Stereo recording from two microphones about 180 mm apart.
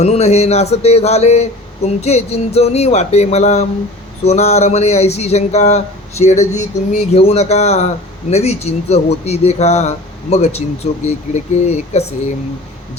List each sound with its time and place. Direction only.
0.0 s a man's voice: 35° left (ahead or behind)